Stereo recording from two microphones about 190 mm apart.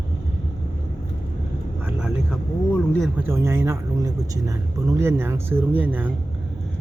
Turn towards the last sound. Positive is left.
turn(degrees=-10)  # may be behind; listen again after turning